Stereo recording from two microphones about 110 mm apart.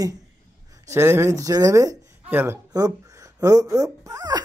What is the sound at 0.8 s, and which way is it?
Speech, 25° right (ahead or behind).